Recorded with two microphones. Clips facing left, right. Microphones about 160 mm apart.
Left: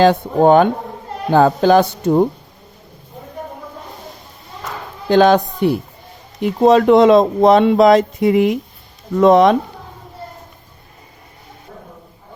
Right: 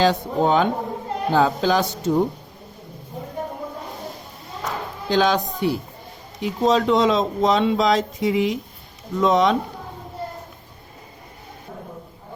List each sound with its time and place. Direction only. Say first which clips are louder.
0.0 s speech: left 7 dB; 55° left (ahead or behind)
5.0 s speech: left 8 dB; 55° left (ahead or behind)